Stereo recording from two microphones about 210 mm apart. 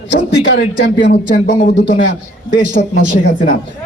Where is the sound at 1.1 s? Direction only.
35° left (ahead or behind).